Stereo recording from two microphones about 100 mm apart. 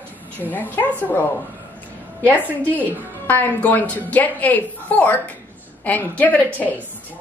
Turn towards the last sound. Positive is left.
turn(degrees=15)  # may be behind; listen again after turning